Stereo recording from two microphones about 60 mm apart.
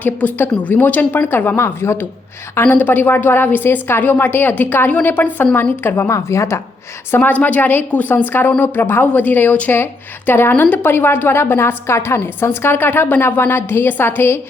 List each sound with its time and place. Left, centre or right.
0.0 s a woman's voice: left
2.6 s a woman's voice: left
5.8 s a woman's voice: left
6.1 s a woman's voice: left
7.2 s a woman's voice: left